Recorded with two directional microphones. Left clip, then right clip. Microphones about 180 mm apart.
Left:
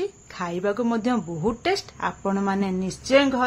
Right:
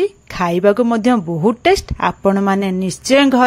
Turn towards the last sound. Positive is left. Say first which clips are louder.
# right 7 dB
turn(degrees=-45)  # may be behind; listen again after turning